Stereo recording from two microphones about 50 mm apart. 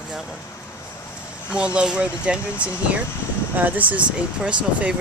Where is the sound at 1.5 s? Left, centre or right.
Right.